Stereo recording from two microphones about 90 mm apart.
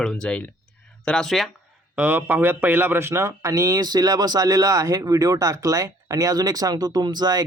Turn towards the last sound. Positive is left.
turn(degrees=-45)  # may be behind; listen again after turning